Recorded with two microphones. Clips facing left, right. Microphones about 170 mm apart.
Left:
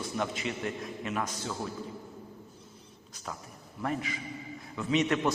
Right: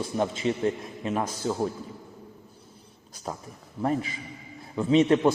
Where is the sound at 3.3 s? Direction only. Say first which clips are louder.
Right 6 dB; 35° right (ahead or behind).